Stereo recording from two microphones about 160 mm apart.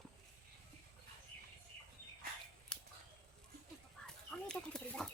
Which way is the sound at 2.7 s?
5° left (ahead or behind).